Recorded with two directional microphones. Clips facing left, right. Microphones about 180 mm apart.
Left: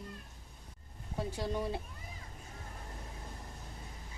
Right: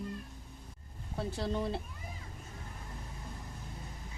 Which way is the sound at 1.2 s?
10° left (ahead or behind).